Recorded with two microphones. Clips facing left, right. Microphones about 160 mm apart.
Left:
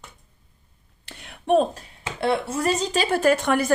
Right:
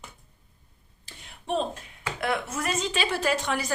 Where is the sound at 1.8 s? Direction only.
30° left (ahead or behind); by 3.7 s 55° left (ahead or behind).